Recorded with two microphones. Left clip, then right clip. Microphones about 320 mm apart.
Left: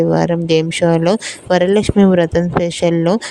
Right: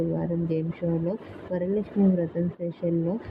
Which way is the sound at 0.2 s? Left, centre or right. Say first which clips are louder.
Left 15 dB; left.